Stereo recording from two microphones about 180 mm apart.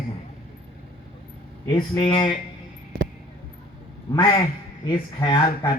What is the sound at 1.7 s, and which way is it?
Speech, 20° left (ahead or behind).